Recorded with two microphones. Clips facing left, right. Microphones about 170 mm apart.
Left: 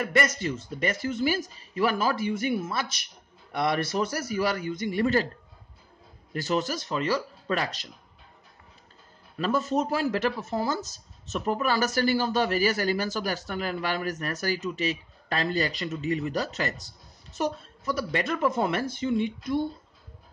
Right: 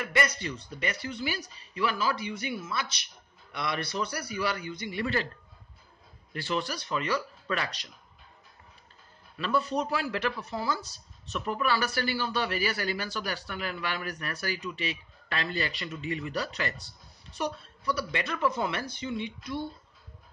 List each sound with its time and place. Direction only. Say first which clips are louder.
0.0 s speech: left 4 dB; 45° left (ahead or behind)
6.3 s speech: left 5 dB; 40° left (ahead or behind)
9.4 s speech: left 3 dB; 45° left (ahead or behind)